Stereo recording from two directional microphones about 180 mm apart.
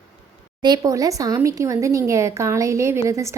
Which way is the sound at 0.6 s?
20° right (ahead or behind).